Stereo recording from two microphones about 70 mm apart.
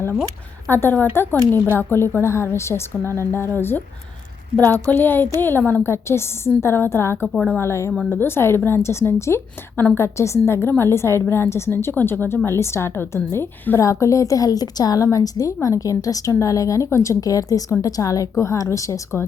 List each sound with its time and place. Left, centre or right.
0.7 s a woman's voice: left
4.9 s speech: left
5.9 s a woman's voice: left
15.0 s a woman's voice: left